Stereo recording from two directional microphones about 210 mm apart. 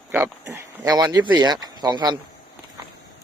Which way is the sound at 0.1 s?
10° right (ahead or behind).